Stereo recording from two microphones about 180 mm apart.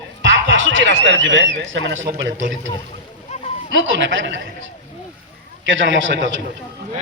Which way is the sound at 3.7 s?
90° right.